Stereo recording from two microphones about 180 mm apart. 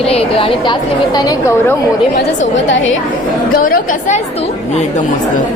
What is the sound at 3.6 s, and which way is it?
Speech, 55° left (ahead or behind).